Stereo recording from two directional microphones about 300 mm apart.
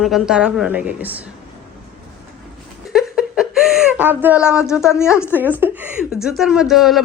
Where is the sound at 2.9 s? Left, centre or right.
Centre.